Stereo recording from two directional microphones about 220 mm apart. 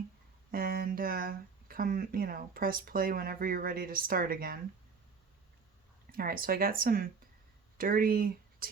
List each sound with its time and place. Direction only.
0.5 s speech: 40° right (ahead or behind)
6.1 s speech: 40° right (ahead or behind)